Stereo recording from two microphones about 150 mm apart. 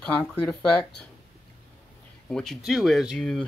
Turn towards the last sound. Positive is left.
turn(degrees=5)  # may be behind; listen again after turning